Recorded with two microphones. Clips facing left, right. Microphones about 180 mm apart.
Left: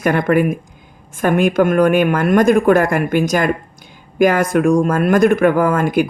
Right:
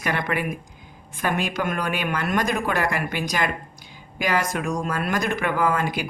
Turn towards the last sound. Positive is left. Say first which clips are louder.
# left 8 dB
turn(degrees=50)  # may be behind; listen again after turning